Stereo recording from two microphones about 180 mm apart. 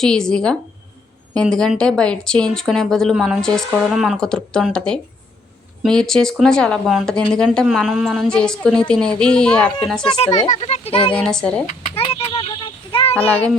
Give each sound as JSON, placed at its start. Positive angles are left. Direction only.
{"t": 0.0, "sound": "speech", "side_deg": 5}
{"t": 10.1, "sound": "a child's voice", "side_deg": 35}
{"t": 11.1, "sound": "speech", "side_deg": 5}
{"t": 11.6, "sound": "a sound", "side_deg": 35}
{"t": 13.1, "sound": "a child's voice", "side_deg": 10}